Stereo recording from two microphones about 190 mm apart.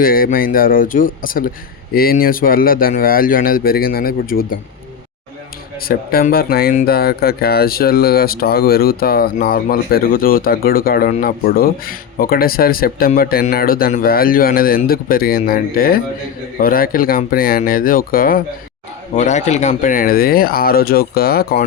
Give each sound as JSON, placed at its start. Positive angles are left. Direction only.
{"t": 0.0, "sound": "speech", "side_deg": 50}
{"t": 5.8, "sound": "speech", "side_deg": 50}
{"t": 19.1, "sound": "speech", "side_deg": 40}